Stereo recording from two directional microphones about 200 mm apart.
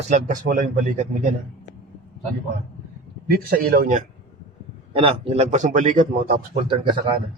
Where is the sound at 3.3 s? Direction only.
50° right (ahead or behind).